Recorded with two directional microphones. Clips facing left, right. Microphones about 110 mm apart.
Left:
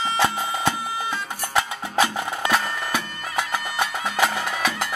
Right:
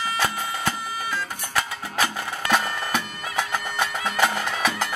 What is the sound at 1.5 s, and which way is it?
Music, 20° left (ahead or behind).